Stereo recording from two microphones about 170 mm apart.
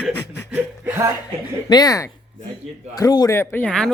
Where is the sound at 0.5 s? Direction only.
10° right (ahead or behind).